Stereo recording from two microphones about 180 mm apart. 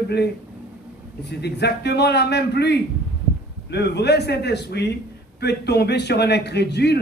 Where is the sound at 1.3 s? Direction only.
65° left (ahead or behind).